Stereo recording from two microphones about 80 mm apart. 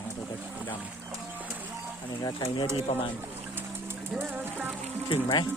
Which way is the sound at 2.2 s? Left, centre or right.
Left.